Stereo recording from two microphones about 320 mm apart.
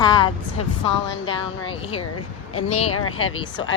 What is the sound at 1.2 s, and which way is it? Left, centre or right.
Speech, centre.